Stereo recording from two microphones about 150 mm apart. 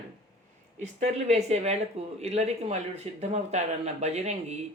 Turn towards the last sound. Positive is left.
turn(degrees=-50)  # may be behind; listen again after turning